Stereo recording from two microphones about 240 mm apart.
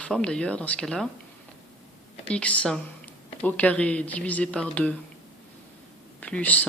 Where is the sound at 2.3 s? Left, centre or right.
Centre.